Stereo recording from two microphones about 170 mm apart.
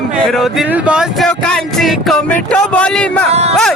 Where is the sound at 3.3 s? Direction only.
40° right (ahead or behind).